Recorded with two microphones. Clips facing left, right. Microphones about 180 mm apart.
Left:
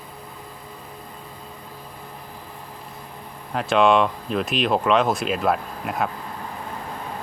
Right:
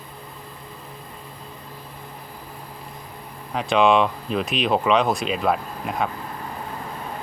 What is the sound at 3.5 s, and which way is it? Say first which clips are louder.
Speech: even; centre (ahead or behind).